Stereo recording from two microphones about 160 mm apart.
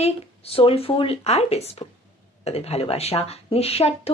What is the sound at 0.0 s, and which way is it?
A woman's voice, 40° left (ahead or behind).